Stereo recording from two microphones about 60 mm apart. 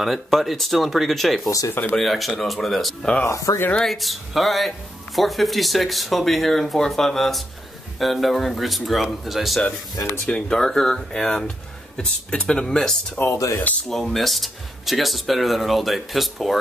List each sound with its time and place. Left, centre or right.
0.0 s speech: centre
3.3 s speech: left
3.8 s speech: centre
10.2 s speech: centre
13.3 s speech: left
13.8 s speech: centre